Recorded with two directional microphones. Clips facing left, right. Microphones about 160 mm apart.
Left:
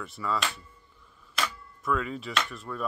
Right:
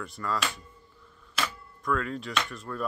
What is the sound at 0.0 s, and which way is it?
Speech, centre (ahead or behind).